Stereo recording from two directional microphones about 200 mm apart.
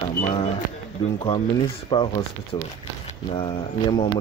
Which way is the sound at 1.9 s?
25° left (ahead or behind).